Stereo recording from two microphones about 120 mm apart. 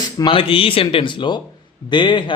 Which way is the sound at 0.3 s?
50° left (ahead or behind).